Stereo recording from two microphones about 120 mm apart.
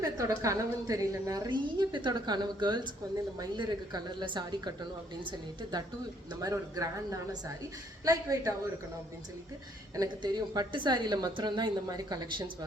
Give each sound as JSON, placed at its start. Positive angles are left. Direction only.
{"t": 0.0, "sound": "a woman's voice", "side_deg": -30}
{"t": 6.4, "sound": "a woman's voice", "side_deg": -30}
{"t": 9.9, "sound": "a woman's voice", "side_deg": -35}